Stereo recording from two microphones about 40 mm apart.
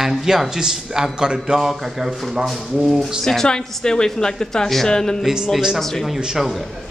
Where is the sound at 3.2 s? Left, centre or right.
Centre.